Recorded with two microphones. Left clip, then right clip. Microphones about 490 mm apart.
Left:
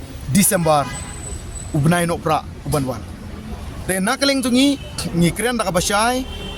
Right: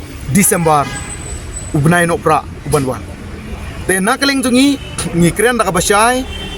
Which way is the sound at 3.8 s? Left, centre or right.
Left.